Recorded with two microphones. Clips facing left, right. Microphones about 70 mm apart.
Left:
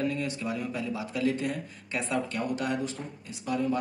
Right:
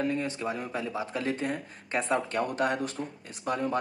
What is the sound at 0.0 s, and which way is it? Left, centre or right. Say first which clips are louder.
Speech: right 1 dB; right.